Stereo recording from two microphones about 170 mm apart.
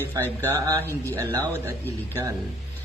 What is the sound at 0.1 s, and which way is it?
Speech, 15° right (ahead or behind).